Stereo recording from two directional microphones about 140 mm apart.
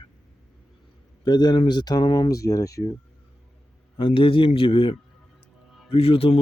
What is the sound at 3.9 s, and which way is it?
A man's voice, 35° left (ahead or behind).